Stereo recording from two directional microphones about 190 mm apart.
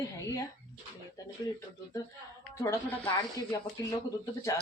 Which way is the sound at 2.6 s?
15° left (ahead or behind).